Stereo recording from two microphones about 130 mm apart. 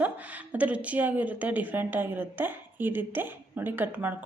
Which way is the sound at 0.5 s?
10° right (ahead or behind).